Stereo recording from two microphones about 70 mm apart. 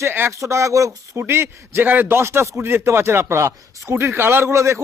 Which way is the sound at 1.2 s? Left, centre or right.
Right.